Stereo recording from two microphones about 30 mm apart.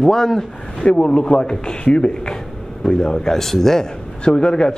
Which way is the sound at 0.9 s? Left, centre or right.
Left.